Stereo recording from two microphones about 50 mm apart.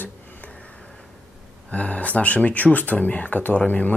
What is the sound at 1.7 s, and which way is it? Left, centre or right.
Speech, left.